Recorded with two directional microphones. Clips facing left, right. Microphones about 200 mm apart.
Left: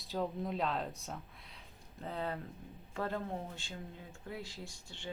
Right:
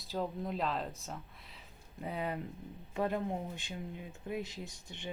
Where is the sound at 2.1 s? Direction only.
15° right (ahead or behind).